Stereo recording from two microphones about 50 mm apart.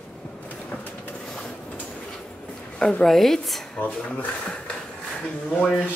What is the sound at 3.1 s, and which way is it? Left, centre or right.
Speech, centre.